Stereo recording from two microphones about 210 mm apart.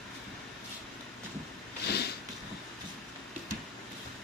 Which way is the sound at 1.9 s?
50° left (ahead or behind).